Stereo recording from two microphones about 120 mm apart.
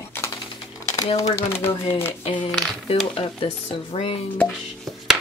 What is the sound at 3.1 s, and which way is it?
Stir, 50° left (ahead or behind).